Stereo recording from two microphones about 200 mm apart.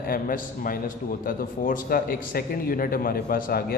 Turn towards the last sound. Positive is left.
turn(degrees=50)  # may be behind; listen again after turning